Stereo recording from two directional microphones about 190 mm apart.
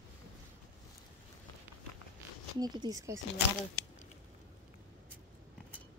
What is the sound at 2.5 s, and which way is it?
Speech, 20° right (ahead or behind).